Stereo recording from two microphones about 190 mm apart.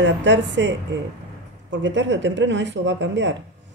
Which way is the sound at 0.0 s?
70° right (ahead or behind).